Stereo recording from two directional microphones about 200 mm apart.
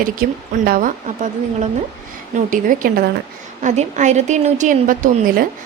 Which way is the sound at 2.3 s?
40° right (ahead or behind).